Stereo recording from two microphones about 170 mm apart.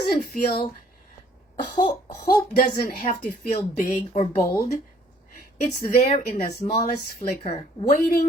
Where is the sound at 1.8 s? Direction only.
25° left (ahead or behind).